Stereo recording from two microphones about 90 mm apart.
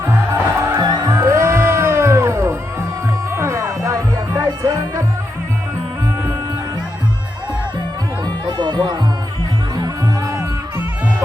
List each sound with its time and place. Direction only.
0.5 s music: 30° right (ahead or behind)
4.4 s music: 45° right (ahead or behind)
8.4 s music: 55° right (ahead or behind); by 10.8 s 35° right (ahead or behind)